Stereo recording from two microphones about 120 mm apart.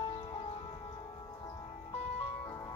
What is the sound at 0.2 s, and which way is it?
Music, 45° left (ahead or behind).